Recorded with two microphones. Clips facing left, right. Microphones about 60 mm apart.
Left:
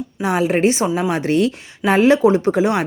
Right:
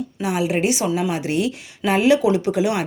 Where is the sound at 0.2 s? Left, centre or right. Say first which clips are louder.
Left 4 dB; left.